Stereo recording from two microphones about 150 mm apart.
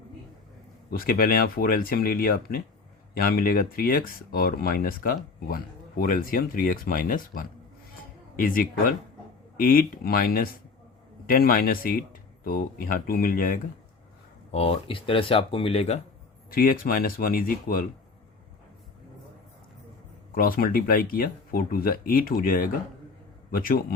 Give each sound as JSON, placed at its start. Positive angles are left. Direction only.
{"t": 0.9, "sound": "speech", "side_deg": 75}
{"t": 14.5, "sound": "speech", "side_deg": 40}
{"t": 16.5, "sound": "speech", "side_deg": 75}
{"t": 20.3, "sound": "speech", "side_deg": 70}